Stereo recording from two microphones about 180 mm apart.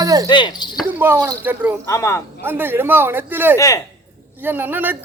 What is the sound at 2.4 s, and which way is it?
Speech, 10° right (ahead or behind).